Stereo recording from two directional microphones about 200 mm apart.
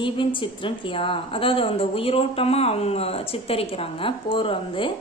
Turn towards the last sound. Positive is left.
turn(degrees=25)  # may be behind; listen again after turning